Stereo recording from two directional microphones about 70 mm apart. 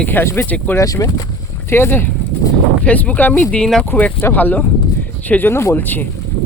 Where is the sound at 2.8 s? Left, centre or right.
Left.